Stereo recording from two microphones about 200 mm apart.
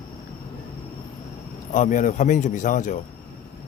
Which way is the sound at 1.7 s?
40° left (ahead or behind).